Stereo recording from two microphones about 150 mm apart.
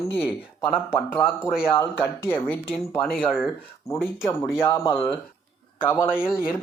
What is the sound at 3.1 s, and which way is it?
Speech, centre (ahead or behind).